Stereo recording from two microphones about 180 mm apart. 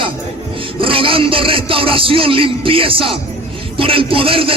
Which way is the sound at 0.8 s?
30° right (ahead or behind).